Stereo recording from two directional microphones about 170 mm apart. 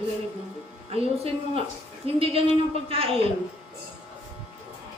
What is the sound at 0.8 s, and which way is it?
A woman's voice, 35° right (ahead or behind).